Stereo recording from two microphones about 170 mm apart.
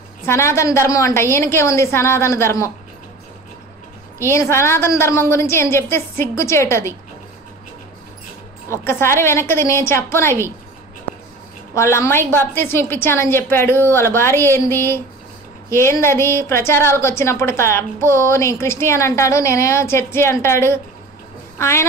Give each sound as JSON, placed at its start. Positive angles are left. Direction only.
{"t": 0.2, "sound": "a woman's voice", "side_deg": 15}
{"t": 4.2, "sound": "a woman's voice", "side_deg": 15}
{"t": 8.6, "sound": "a woman's voice", "side_deg": 15}
{"t": 11.7, "sound": "a woman's voice", "side_deg": 15}